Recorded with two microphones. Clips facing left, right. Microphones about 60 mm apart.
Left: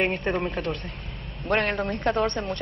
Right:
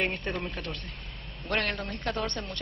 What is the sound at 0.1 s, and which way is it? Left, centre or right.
Speech, left.